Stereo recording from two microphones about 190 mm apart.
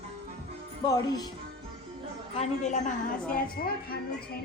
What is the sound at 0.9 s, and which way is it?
Speech, 20° left (ahead or behind).